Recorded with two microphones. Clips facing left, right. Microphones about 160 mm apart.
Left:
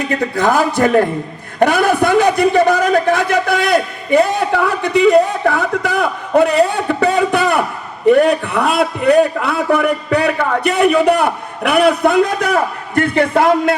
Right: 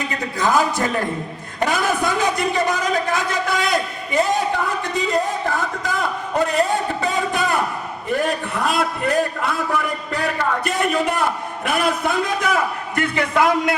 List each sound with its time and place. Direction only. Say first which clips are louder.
0.3 s a man's voice: left 4 dB; 60° left (ahead or behind)
13.3 s speech: left 3 dB; 30° left (ahead or behind)